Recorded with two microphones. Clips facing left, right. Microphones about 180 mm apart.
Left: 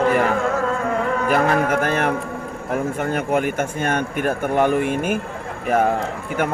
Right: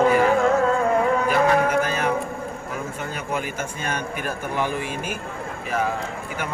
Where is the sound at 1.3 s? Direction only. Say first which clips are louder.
Left 3 dB; 50° left (ahead or behind).